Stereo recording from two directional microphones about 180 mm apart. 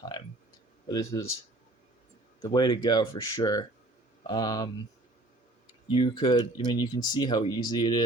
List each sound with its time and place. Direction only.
0.9 s speech: 25° left (ahead or behind)
2.4 s speech: 25° left (ahead or behind)
5.9 s speech: 30° left (ahead or behind)